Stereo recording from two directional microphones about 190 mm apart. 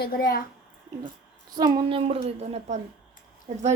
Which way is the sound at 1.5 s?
20° right (ahead or behind).